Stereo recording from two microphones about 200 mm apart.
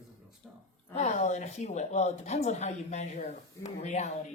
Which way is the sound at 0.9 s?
35° left (ahead or behind).